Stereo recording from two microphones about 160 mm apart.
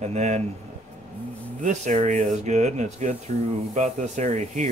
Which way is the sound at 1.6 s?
50° right (ahead or behind).